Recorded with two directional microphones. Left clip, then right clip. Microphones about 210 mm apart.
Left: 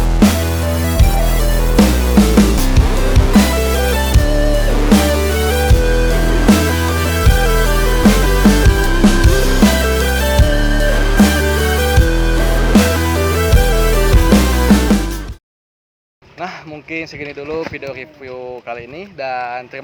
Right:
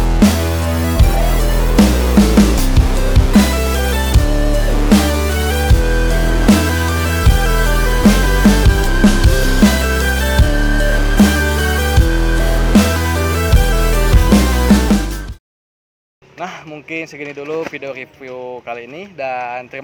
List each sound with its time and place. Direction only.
0.0 s music: centre (ahead or behind)
17.5 s speech: 30° right (ahead or behind)
19.2 s speech: 30° right (ahead or behind)